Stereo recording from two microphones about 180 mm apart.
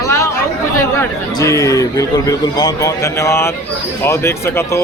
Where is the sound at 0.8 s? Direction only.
15° left (ahead or behind).